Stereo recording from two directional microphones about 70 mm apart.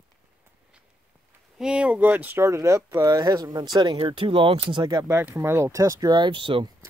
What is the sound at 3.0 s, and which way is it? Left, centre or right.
Speech, right.